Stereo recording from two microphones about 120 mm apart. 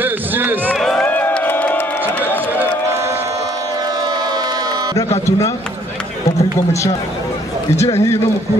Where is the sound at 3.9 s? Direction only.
35° right (ahead or behind).